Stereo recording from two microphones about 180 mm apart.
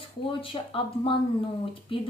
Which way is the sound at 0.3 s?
30° left (ahead or behind).